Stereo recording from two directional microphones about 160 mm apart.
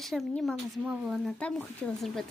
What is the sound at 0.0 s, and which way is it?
Speech, centre (ahead or behind).